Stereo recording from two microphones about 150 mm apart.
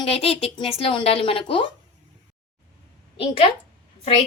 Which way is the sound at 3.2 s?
40° left (ahead or behind).